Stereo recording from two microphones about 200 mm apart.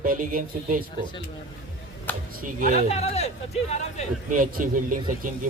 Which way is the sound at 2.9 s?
30° left (ahead or behind).